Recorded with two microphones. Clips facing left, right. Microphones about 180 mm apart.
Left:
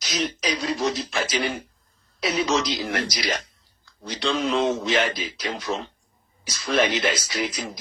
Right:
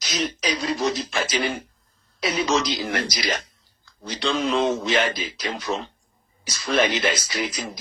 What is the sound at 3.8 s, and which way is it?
Clicking, centre (ahead or behind).